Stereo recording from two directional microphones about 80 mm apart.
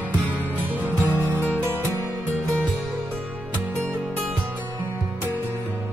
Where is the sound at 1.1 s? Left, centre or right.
Right.